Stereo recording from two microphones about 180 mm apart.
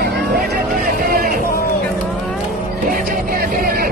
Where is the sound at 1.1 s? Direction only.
50° right (ahead or behind).